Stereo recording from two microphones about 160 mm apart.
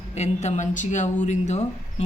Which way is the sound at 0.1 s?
45° left (ahead or behind).